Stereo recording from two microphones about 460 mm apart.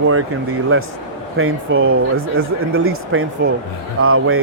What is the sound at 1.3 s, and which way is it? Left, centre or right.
Speech, right.